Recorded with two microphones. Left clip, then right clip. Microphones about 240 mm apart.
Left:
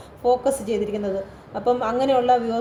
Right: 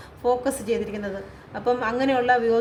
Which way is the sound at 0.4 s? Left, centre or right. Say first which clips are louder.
Left 3 dB; right.